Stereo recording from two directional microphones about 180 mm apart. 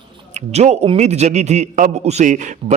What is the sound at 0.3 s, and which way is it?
A man's voice, 40° right (ahead or behind).